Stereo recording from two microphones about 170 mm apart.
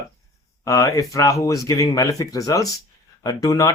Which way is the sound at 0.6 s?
20° left (ahead or behind).